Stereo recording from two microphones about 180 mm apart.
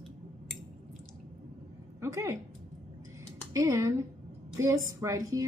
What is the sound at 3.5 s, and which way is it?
A woman's voice, 20° right (ahead or behind).